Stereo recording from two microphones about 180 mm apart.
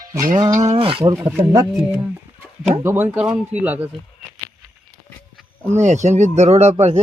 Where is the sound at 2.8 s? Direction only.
15° right (ahead or behind).